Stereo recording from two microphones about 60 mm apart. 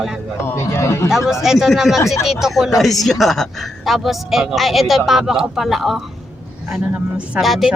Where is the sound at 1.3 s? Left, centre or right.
Centre.